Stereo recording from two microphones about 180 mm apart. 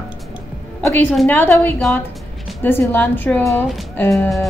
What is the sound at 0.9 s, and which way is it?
A woman's voice, 5° left (ahead or behind).